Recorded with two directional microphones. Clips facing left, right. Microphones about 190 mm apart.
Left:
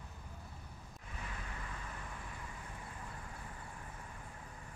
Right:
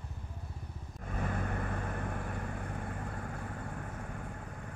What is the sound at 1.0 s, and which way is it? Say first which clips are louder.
Vehicle: right 13 dB; 55° right (ahead or behind).